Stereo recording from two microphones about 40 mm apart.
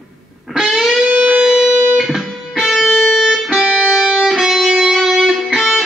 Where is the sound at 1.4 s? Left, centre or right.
Centre.